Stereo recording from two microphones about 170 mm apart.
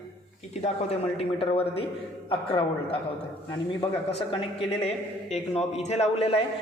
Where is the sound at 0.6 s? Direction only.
40° left (ahead or behind).